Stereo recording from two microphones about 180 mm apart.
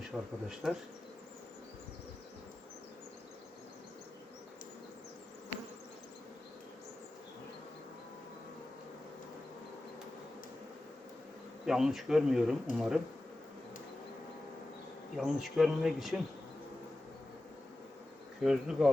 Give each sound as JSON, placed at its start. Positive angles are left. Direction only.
{"t": 0.1, "sound": "speech", "side_deg": -5}
{"t": 11.6, "sound": "speech", "side_deg": 0}
{"t": 15.1, "sound": "speech", "side_deg": 0}
{"t": 18.4, "sound": "speech", "side_deg": -5}